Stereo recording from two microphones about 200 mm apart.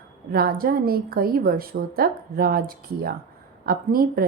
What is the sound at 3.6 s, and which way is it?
Speech, 50° right (ahead or behind).